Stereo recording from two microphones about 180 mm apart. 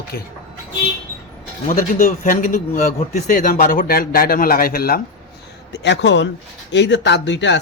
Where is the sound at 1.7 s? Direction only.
50° left (ahead or behind).